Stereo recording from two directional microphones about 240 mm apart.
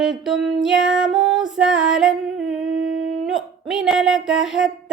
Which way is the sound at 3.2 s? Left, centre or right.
Centre.